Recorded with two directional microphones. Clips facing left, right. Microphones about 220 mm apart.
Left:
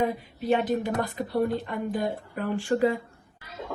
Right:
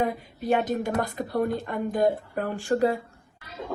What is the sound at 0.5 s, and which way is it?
Speech, 45° right (ahead or behind).